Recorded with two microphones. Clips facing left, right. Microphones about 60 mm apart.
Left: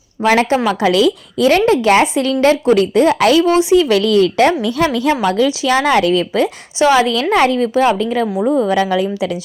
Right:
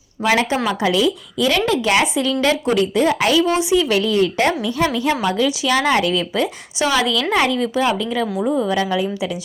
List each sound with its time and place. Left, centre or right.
0.2 s a woman's voice: left
0.8 s a woman's voice: left
1.4 s a woman's voice: left
4.6 s a woman's voice: left
5.2 s a woman's voice: left
8.3 s a woman's voice: left
8.5 s a woman's voice: left